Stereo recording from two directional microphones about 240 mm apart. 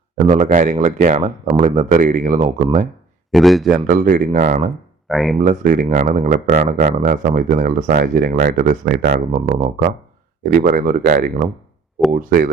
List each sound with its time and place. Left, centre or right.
0.3 s speech: right
3.3 s a man's voice: centre
3.7 s speech: right
5.0 s a man's voice: centre
5.4 s speech: right
10.4 s speech: right